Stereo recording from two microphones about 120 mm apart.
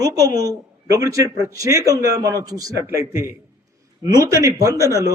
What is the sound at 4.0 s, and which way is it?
Speech, 30° right (ahead or behind).